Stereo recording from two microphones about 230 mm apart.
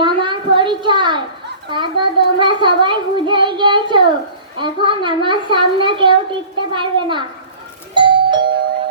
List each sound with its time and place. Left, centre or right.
0.0 s a sound: right
1.7 s a child's voice: right
7.9 s music: right